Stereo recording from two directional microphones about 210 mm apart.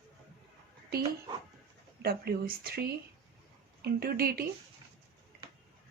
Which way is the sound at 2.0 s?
45° right (ahead or behind).